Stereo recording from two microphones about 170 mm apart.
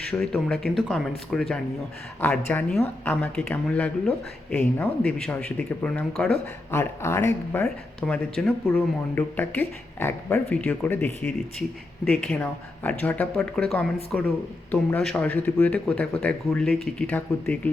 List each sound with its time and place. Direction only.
0.2 s speech: 5° left (ahead or behind)